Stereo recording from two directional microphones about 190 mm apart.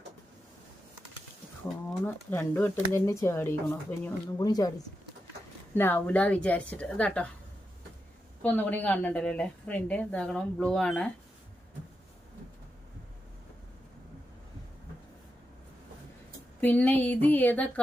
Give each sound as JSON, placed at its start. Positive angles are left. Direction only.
{"t": 1.9, "sound": "a woman's voice", "side_deg": 5}
{"t": 5.7, "sound": "a woman's voice", "side_deg": 10}
{"t": 8.4, "sound": "a woman's voice", "side_deg": 10}
{"t": 16.6, "sound": "a woman's voice", "side_deg": 10}